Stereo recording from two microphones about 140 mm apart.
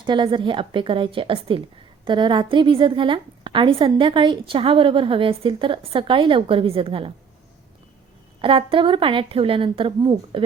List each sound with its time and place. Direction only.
0.0 s a woman's voice: 35° right (ahead or behind)
8.4 s a woman's voice: 40° right (ahead or behind)